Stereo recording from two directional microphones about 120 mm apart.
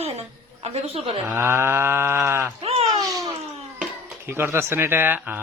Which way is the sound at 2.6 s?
55° right (ahead or behind).